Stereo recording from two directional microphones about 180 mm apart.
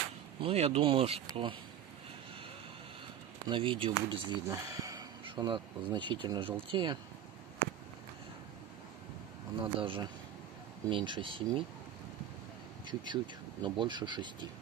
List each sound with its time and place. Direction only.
0.4 s speech: 30° right (ahead or behind)
3.4 s speech: 25° right (ahead or behind)
9.6 s speech: 30° right (ahead or behind)
12.8 s speech: 25° right (ahead or behind)